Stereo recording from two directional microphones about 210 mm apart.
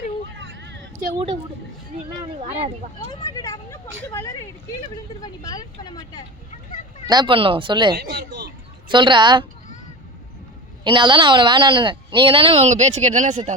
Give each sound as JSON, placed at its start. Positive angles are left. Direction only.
{"t": 0.3, "sound": "a sound", "side_deg": -60}
{"t": 3.1, "sound": "speech", "side_deg": 20}
{"t": 7.1, "sound": "speech", "side_deg": -20}
{"t": 7.9, "sound": "speech", "side_deg": -50}
{"t": 8.9, "sound": "speech", "side_deg": -20}
{"t": 10.8, "sound": "speech", "side_deg": -25}